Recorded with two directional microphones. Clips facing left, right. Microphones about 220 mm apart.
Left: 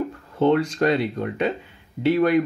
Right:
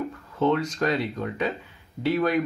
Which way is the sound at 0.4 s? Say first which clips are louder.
Left 4 dB; 30° left (ahead or behind).